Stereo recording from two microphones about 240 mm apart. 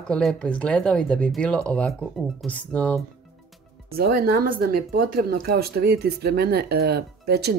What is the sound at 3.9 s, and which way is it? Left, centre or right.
Speech, right.